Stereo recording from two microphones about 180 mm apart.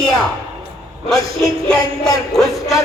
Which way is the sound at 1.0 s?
5° left (ahead or behind).